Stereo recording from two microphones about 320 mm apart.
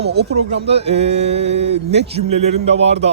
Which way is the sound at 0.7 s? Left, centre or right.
Centre.